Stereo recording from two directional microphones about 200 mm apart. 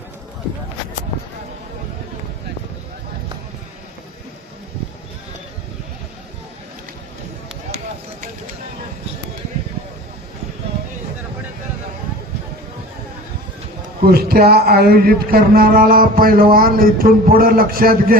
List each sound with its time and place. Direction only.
14.0 s a man's voice: 50° right (ahead or behind)